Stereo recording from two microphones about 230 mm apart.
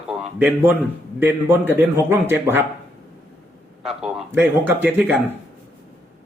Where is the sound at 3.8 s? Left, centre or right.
Centre.